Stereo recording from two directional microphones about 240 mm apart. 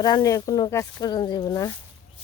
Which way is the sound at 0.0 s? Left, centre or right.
Centre.